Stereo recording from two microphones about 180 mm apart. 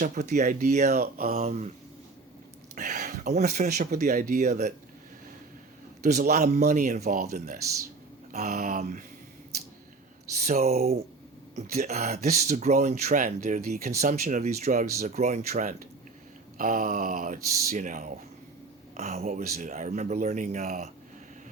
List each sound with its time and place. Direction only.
0.0 s speech: 45° right (ahead or behind)
0.9 s mantra: 55° right (ahead or behind)
1.4 s speech: 40° right (ahead or behind)
2.7 s speech: 45° right (ahead or behind)
6.0 s a man's voice: 40° right (ahead or behind)
10.4 s speech: 40° right (ahead or behind)